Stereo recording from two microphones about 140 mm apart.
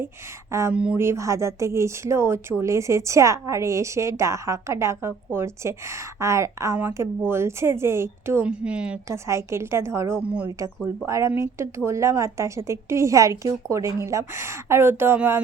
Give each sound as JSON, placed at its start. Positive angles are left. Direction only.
{"t": 0.7, "sound": "speech", "side_deg": -10}
{"t": 1.0, "sound": "speech", "side_deg": -20}
{"t": 8.4, "sound": "speech", "side_deg": -5}
{"t": 9.0, "sound": "speech", "side_deg": -20}
{"t": 10.2, "sound": "speech", "side_deg": -10}
{"t": 10.8, "sound": "speech", "side_deg": -20}